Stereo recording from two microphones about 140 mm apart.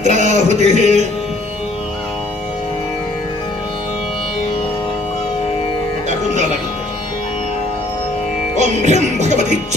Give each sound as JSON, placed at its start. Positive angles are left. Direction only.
{"t": 0.0, "sound": "music", "side_deg": -60}
{"t": 6.0, "sound": "music", "side_deg": -60}
{"t": 8.5, "sound": "music", "side_deg": -55}